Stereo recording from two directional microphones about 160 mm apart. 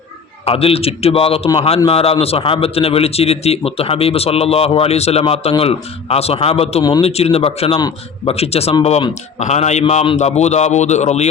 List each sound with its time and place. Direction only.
0.4 s a man's voice: 35° left (ahead or behind)
7.8 s a man's voice: 25° left (ahead or behind)
8.3 s a man's voice: 40° left (ahead or behind)